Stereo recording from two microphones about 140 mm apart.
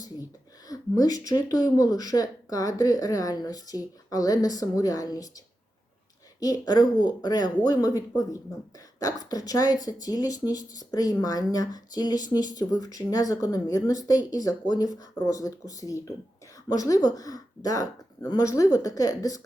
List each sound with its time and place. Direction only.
0.7 s speech: 25° left (ahead or behind)
6.4 s speech: 25° left (ahead or behind)